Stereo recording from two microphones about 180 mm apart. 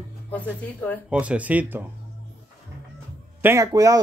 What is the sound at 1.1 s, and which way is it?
Speech, 10° right (ahead or behind).